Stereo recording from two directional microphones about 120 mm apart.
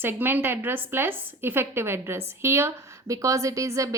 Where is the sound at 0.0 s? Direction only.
20° right (ahead or behind).